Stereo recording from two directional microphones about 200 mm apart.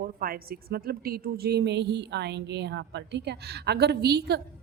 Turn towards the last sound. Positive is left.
turn(degrees=-55)  # may be behind; listen again after turning